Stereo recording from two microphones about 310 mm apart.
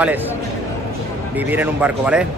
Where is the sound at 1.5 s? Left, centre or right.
Centre.